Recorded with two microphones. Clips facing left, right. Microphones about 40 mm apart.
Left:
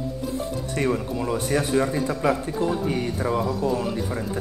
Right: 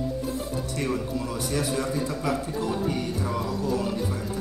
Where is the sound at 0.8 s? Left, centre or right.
Left.